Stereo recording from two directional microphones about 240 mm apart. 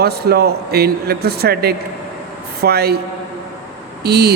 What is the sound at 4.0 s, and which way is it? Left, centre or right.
Speech, right.